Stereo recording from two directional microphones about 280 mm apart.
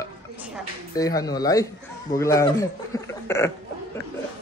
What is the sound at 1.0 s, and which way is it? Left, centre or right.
A man's voice, centre.